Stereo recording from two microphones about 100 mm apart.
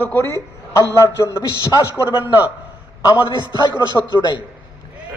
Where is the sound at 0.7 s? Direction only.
30° left (ahead or behind).